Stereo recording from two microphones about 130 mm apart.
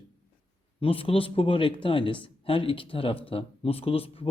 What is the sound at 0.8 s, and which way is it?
Speech, 45° left (ahead or behind).